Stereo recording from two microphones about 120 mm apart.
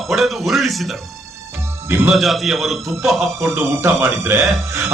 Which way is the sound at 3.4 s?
20° right (ahead or behind).